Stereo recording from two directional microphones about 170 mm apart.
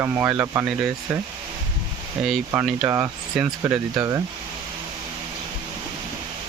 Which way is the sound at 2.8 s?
15° right (ahead or behind).